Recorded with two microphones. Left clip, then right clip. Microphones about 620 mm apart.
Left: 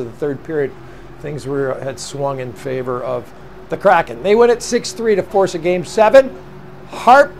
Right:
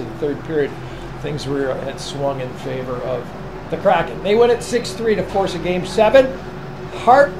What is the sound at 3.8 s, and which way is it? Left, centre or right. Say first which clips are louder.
Speech: left 4 dB; left.